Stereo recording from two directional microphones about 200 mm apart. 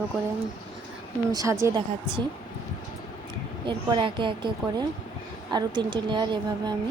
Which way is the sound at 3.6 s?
25° right (ahead or behind).